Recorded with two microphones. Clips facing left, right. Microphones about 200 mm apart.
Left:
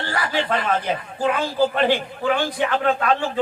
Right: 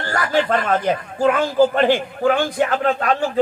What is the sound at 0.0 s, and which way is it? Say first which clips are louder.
A man's voice: right 4 dB; 45° right (ahead or behind).